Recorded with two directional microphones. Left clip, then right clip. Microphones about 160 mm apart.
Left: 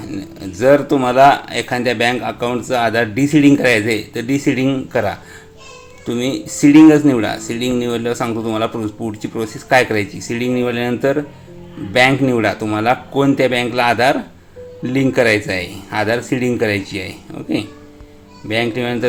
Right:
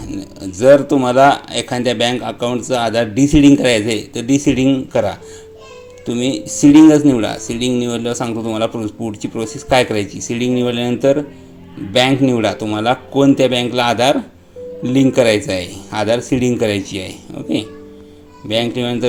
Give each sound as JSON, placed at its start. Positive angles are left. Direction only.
{"t": 0.2, "sound": "speech", "side_deg": -30}
{"t": 12.3, "sound": "speech", "side_deg": -25}